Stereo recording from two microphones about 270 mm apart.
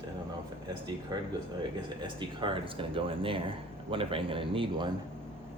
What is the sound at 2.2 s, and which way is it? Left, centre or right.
Speech, centre.